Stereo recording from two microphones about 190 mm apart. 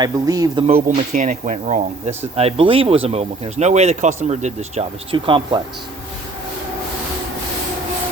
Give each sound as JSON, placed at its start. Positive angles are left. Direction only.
{"t": 0.0, "sound": "a man's voice", "side_deg": -20}
{"t": 0.9, "sound": "speech", "side_deg": -40}